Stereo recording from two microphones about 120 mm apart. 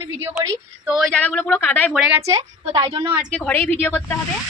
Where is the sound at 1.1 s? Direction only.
10° left (ahead or behind).